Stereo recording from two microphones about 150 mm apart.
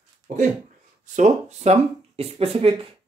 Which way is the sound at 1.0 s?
50° right (ahead or behind).